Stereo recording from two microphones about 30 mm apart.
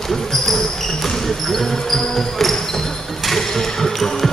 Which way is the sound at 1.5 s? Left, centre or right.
Centre.